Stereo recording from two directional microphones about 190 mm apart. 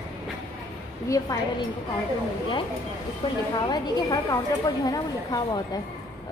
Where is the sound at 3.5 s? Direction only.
20° left (ahead or behind).